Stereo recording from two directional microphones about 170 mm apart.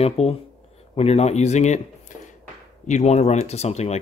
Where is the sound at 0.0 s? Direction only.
40° left (ahead or behind).